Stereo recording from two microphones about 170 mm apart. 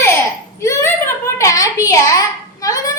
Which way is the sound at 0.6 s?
15° left (ahead or behind).